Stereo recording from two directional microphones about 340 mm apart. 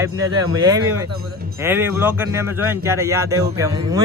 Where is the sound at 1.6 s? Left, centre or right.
Centre.